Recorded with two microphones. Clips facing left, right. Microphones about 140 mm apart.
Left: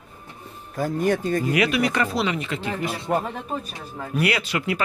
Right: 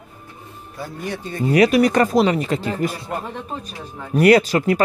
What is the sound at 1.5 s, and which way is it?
Speech, 40° right (ahead or behind).